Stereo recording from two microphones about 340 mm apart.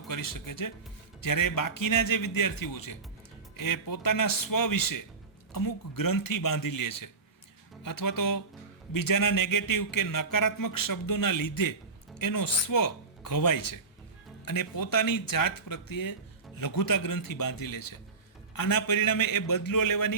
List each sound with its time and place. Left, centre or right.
0.1 s speech: left